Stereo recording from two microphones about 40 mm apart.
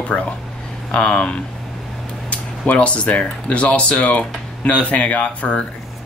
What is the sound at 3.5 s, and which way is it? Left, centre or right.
Speech, left.